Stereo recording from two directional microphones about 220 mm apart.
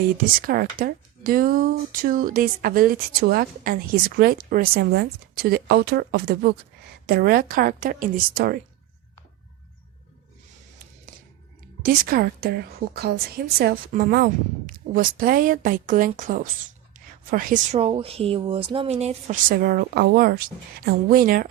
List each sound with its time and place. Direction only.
0.4 s a woman's voice: 40° right (ahead or behind)
11.8 s a woman's voice: 40° right (ahead or behind)